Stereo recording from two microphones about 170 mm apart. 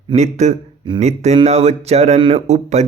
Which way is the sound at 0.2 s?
40° right (ahead or behind).